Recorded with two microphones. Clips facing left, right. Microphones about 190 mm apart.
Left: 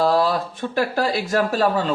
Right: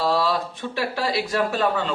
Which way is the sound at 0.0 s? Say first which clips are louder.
Left 3 dB; 45° left (ahead or behind).